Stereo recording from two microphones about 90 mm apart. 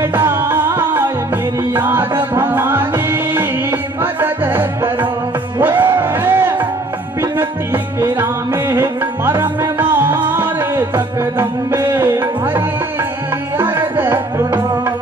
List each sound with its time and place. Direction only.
0.0 s music: 25° right (ahead or behind)